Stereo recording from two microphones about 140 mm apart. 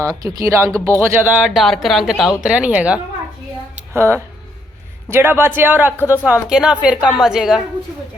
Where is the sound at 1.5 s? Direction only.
Centre (ahead or behind).